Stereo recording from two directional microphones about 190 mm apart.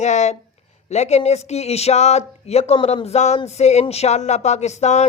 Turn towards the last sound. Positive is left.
turn(degrees=35)  # may be behind; listen again after turning